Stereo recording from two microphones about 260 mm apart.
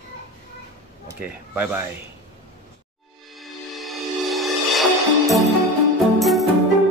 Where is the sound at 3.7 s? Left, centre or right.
Centre.